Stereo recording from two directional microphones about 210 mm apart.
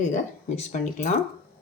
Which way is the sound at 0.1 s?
35° left (ahead or behind).